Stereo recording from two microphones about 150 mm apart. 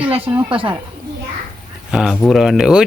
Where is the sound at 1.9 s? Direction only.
Centre (ahead or behind).